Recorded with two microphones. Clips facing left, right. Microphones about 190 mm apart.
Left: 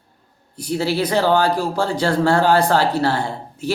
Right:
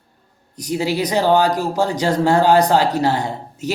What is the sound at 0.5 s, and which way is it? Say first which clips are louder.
Speech: even; 15° right (ahead or behind).